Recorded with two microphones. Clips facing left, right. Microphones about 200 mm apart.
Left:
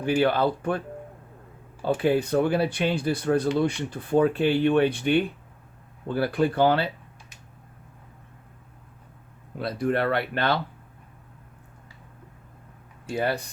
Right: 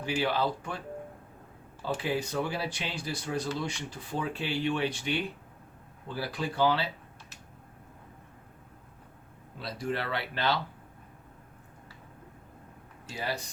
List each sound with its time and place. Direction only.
0.0 s speech: 55° left (ahead or behind)
2.0 s speech: 55° left (ahead or behind)
9.6 s speech: 55° left (ahead or behind)
13.1 s speech: 55° left (ahead or behind)